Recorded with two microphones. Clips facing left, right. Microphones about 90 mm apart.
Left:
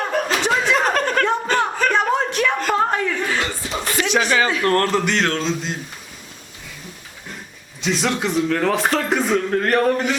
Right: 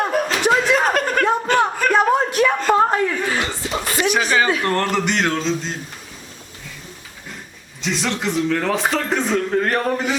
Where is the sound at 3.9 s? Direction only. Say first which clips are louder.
Even; 20° right (ahead or behind).